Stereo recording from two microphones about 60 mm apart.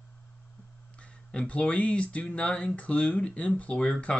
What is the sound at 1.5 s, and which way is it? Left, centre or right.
Speech, centre.